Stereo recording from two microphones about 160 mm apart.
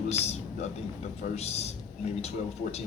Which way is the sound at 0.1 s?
40° left (ahead or behind).